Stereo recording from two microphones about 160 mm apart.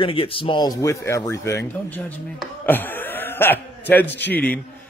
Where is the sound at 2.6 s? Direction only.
10° left (ahead or behind).